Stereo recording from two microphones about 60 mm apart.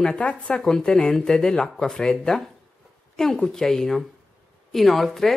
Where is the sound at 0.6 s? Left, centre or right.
Centre.